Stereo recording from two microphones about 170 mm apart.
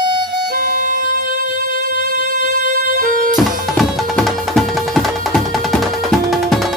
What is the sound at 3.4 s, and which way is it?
Music, centre (ahead or behind).